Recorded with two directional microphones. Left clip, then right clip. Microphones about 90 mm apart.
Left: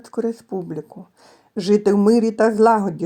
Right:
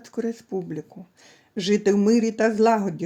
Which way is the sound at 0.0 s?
25° left (ahead or behind).